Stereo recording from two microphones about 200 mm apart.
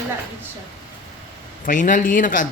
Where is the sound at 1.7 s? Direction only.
40° left (ahead or behind).